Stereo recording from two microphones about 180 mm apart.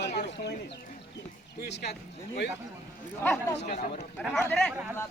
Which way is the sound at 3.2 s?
10° left (ahead or behind).